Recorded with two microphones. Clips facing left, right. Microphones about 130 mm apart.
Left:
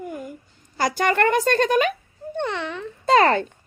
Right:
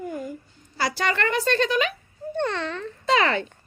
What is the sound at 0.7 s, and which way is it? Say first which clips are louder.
A child's voice: left 5 dB; 45° left (ahead or behind).